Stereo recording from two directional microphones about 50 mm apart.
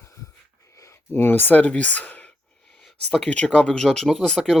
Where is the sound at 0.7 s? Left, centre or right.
Left.